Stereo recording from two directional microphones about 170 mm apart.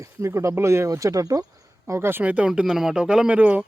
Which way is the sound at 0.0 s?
15° right (ahead or behind).